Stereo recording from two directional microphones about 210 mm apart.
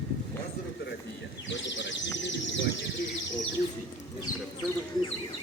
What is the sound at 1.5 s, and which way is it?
Bird, 60° left (ahead or behind).